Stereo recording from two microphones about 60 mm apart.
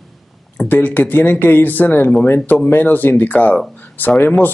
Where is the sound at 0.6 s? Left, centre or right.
Left.